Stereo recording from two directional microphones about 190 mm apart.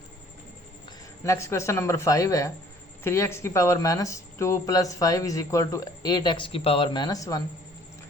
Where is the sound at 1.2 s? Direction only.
15° left (ahead or behind).